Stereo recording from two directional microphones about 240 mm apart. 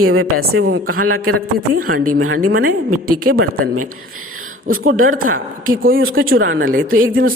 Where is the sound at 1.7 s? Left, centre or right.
Right.